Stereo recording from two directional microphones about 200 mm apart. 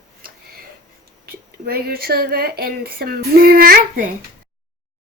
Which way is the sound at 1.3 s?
50° right (ahead or behind).